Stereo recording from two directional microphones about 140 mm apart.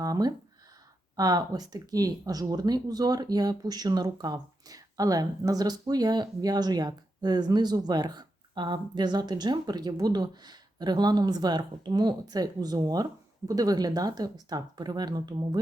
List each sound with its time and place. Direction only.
0.0 s speech: 25° right (ahead or behind)